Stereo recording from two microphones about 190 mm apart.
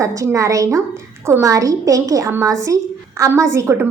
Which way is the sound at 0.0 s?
15° right (ahead or behind).